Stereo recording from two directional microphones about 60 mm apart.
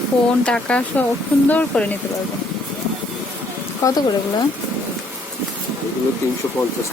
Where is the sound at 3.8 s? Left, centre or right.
Left.